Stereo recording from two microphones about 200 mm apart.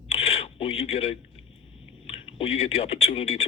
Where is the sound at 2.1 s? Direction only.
30° left (ahead or behind).